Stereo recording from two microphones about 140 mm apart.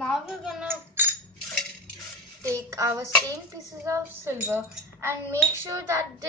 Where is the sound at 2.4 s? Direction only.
20° right (ahead or behind).